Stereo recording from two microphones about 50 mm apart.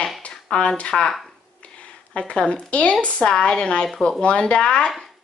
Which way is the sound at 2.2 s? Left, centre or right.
Left.